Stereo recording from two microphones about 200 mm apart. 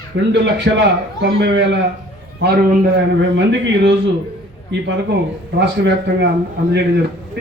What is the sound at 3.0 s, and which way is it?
A man's voice, 65° right (ahead or behind).